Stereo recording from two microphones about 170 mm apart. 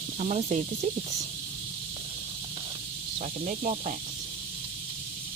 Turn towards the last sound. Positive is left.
turn(degrees=-45)  # may be behind; listen again after turning